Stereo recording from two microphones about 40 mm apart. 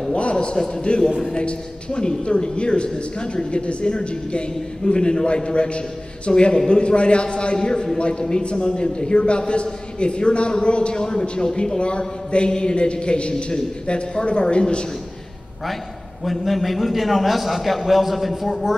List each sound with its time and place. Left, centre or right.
0.1 s a man's voice: left
16.3 s a man's voice: centre